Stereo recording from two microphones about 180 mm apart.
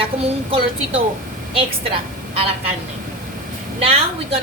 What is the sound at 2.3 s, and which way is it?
Speech, 35° right (ahead or behind).